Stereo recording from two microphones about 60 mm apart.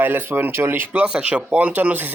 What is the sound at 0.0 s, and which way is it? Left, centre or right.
Speech, right.